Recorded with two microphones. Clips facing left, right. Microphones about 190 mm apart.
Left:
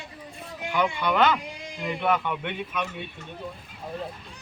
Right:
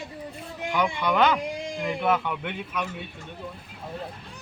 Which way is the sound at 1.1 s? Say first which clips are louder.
Right 2 dB; 10° right (ahead or behind).